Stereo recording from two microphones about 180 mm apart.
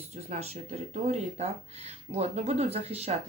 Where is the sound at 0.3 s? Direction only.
35° right (ahead or behind).